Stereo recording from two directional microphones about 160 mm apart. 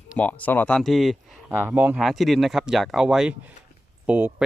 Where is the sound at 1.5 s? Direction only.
10° right (ahead or behind).